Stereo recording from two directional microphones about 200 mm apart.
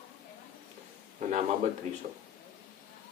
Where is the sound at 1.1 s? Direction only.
35° right (ahead or behind).